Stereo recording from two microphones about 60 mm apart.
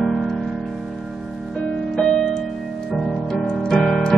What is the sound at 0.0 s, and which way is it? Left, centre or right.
Music, centre.